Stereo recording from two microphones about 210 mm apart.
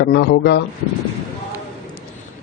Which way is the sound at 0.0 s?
55° left (ahead or behind).